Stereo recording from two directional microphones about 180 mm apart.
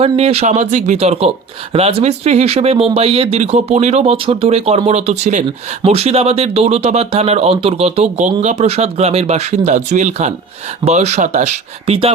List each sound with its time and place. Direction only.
0.0 s speech: 35° right (ahead or behind)